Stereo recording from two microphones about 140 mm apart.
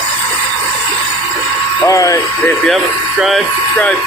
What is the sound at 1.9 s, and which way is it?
Speech, 25° left (ahead or behind).